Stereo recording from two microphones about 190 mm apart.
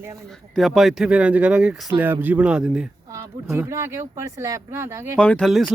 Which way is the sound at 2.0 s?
10° right (ahead or behind).